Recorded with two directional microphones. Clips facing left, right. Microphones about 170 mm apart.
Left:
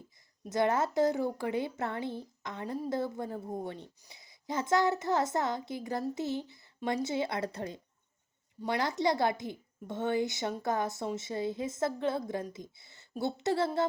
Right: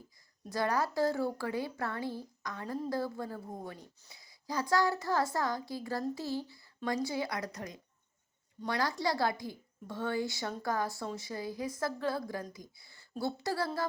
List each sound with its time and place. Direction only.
0.5 s a woman's voice: 20° left (ahead or behind)